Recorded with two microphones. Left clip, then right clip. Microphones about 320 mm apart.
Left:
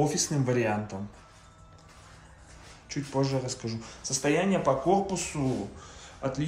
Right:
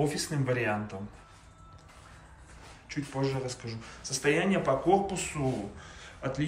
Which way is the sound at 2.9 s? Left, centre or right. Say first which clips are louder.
Left 3 dB; centre.